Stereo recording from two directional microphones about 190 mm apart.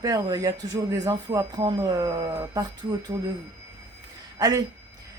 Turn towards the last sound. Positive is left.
turn(degrees=-20)  # may be behind; listen again after turning